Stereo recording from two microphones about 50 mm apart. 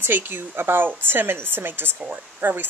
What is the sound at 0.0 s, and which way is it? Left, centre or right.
Speech, right.